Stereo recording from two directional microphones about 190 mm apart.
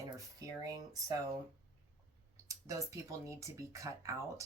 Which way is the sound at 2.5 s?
15° right (ahead or behind).